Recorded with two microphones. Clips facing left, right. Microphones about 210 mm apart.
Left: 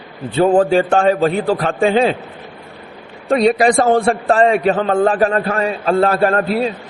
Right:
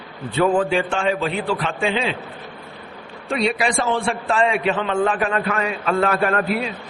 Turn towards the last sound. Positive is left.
turn(degrees=30)  # may be behind; listen again after turning